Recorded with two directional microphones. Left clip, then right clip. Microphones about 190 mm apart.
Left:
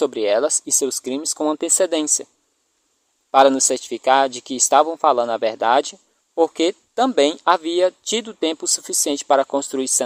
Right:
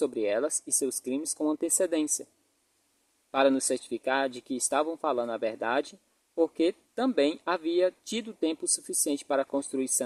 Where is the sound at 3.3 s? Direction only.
25° left (ahead or behind).